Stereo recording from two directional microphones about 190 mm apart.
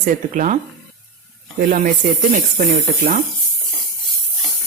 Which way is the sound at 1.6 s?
50° right (ahead or behind).